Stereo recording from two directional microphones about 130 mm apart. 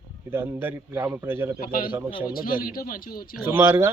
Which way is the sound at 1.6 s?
90° left.